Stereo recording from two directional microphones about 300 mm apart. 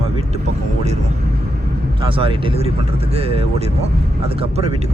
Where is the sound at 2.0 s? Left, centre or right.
Centre.